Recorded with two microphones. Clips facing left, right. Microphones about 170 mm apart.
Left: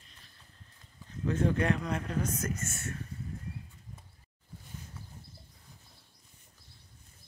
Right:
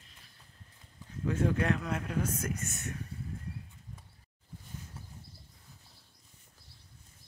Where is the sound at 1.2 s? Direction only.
5° right (ahead or behind).